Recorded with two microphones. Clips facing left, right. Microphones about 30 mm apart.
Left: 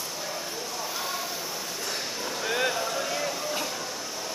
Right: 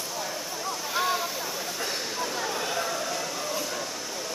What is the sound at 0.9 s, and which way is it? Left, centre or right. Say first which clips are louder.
Vehicle: right 9 dB; right.